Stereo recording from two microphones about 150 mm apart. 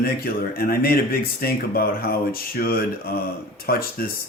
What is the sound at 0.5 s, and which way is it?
Speech, 80° left.